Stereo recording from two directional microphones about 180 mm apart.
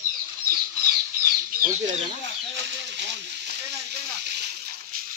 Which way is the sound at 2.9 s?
75° right (ahead or behind).